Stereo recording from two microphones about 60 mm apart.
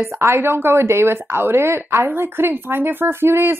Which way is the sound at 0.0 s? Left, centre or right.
Right.